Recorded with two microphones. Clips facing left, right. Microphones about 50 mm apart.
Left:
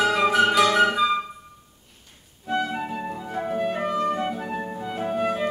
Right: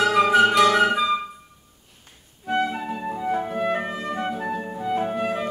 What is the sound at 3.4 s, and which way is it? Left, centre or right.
Music, centre.